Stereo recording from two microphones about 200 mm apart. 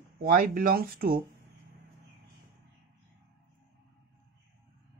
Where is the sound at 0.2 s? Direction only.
45° right (ahead or behind).